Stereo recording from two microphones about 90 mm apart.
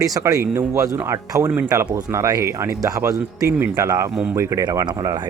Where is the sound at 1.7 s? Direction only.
40° right (ahead or behind).